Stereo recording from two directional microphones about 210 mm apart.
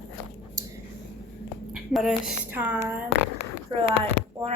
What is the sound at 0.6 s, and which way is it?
Whispering, 15° right (ahead or behind).